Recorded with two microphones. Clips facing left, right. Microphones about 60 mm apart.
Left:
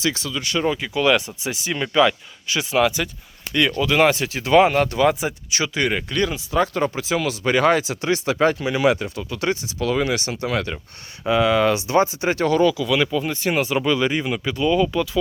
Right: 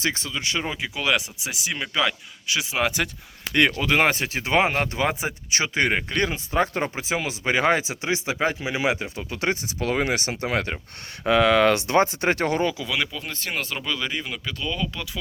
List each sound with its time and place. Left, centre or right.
0.0 s speech: right
0.6 s speech: centre
3.8 s speech: right
11.3 s speech: right
12.5 s speech: right
13.0 s speech: centre